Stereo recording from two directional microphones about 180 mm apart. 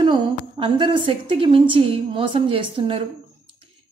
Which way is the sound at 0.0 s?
25° right (ahead or behind).